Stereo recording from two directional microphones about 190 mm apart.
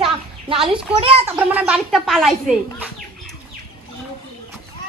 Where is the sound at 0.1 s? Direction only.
30° right (ahead or behind).